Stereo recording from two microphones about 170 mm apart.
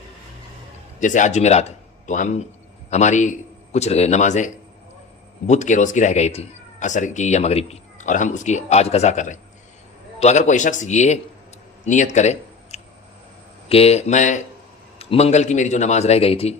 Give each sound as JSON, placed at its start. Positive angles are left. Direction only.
{"t": 0.9, "sound": "a man's voice", "side_deg": 45}